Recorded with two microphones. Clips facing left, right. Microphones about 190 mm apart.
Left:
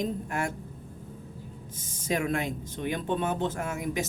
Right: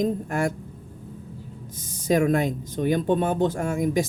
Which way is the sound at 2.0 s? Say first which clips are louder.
Right 8 dB; 40° right (ahead or behind).